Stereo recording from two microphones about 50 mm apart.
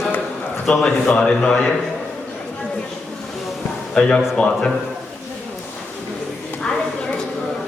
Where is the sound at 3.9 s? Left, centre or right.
Centre.